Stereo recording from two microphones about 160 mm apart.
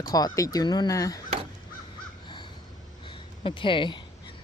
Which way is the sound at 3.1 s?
30° left (ahead or behind).